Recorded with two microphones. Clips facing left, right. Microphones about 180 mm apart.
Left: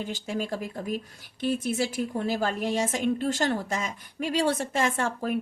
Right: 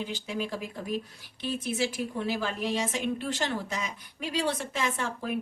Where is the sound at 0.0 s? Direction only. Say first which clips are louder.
Left 2 dB; 45° left (ahead or behind).